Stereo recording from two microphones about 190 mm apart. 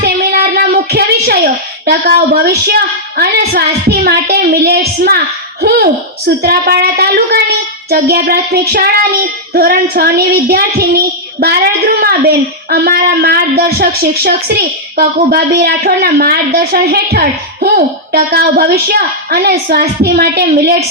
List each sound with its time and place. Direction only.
0.0 s child singing: 55° right (ahead or behind)
1.9 s speech: 55° right (ahead or behind)
7.9 s child singing: 55° right (ahead or behind)
12.7 s speech: 55° right (ahead or behind)